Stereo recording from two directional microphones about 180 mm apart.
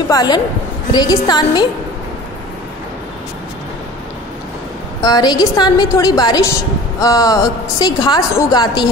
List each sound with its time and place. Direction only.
0.1 s a woman's voice: 20° left (ahead or behind)
5.0 s a woman's voice: 20° left (ahead or behind)